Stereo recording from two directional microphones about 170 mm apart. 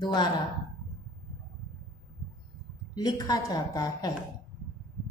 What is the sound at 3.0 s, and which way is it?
A woman's voice, 25° left (ahead or behind).